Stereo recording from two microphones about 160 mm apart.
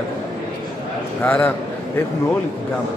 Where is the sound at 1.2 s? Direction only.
10° left (ahead or behind).